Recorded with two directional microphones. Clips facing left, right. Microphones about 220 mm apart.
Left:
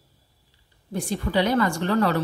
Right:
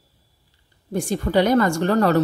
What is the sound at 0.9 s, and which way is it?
A woman's voice, 45° right (ahead or behind).